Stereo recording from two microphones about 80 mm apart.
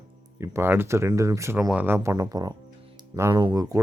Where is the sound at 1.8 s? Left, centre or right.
Right.